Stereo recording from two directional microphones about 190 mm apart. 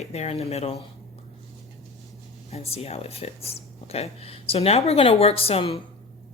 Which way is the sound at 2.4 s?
30° left (ahead or behind).